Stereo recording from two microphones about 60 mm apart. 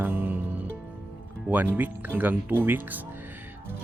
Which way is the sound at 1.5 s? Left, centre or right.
Right.